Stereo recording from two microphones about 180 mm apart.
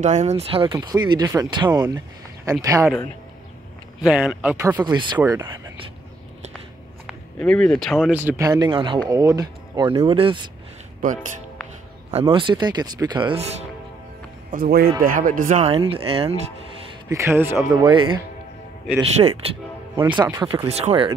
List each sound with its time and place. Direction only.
0.0 s speech: 40° right (ahead or behind); by 2.9 s 20° right (ahead or behind)
4.0 s speech: 5° right (ahead or behind)
4.8 s speech: 25° right (ahead or behind)
7.3 s speech: 5° left (ahead or behind); by 10.5 s 30° right (ahead or behind)
12.1 s speech: 30° right (ahead or behind)
14.5 s speech: 55° right (ahead or behind); by 16.3 s 30° right (ahead or behind)
17.1 s speech: 15° right (ahead or behind); by 19.5 s 35° right (ahead or behind)
20.2 s speech: 20° right (ahead or behind)
20.5 s speech: 35° right (ahead or behind)